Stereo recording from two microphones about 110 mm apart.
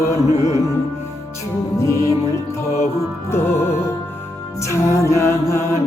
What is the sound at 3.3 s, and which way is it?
Music, 25° left (ahead or behind).